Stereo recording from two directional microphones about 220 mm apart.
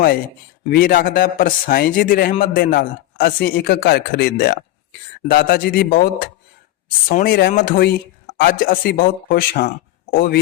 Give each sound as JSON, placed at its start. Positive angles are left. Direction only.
{"t": 0.7, "sound": "a man's voice", "side_deg": 40}
{"t": 7.1, "sound": "a man's voice", "side_deg": 45}